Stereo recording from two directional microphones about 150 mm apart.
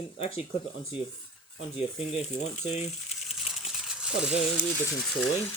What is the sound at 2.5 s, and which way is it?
Speech, 50° left (ahead or behind).